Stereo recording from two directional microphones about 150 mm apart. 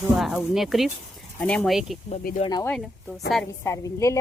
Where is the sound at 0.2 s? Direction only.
Centre (ahead or behind).